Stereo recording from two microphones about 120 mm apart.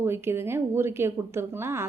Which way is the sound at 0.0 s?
20° right (ahead or behind).